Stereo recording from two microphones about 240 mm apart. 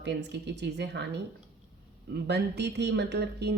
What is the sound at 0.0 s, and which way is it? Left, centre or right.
A woman's voice, right.